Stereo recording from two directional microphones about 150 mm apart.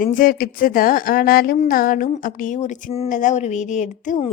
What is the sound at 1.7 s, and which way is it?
A woman's voice, 70° left (ahead or behind).